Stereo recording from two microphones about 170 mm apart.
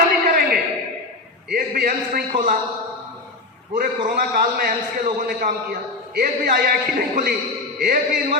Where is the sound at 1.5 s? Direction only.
60° right (ahead or behind).